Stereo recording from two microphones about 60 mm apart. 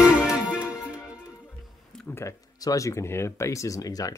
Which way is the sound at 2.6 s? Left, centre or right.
Left.